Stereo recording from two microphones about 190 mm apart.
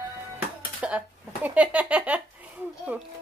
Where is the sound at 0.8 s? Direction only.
5° right (ahead or behind).